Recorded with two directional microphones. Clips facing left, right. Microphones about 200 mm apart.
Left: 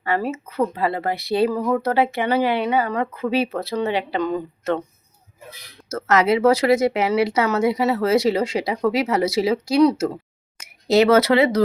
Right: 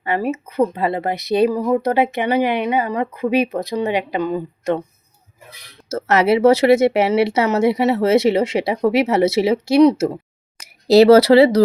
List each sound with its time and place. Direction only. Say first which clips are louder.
0.0 s speech: right 2 dB; 20° right (ahead or behind)
5.9 s speech: right 2 dB; 30° right (ahead or behind)